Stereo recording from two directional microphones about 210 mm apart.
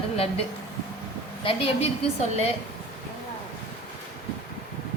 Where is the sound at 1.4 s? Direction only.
25° left (ahead or behind).